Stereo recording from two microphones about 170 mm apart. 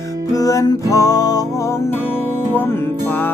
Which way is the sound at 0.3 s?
20° left (ahead or behind).